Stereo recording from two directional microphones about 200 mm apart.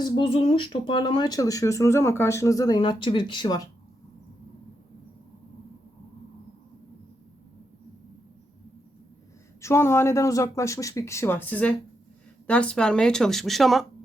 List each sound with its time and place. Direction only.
0.0 s speech: 25° left (ahead or behind)
9.6 s speech: 15° left (ahead or behind)